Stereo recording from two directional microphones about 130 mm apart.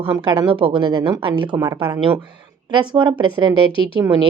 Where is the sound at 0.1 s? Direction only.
35° right (ahead or behind).